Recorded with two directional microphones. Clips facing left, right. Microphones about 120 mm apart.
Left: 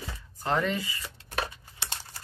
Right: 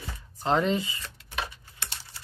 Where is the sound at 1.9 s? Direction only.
45° left (ahead or behind).